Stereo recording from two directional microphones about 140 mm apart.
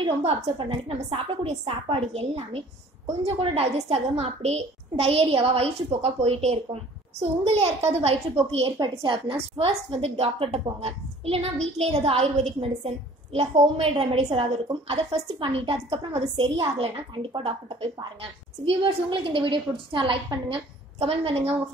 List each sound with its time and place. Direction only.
0.0 s a woman's voice: 40° right (ahead or behind)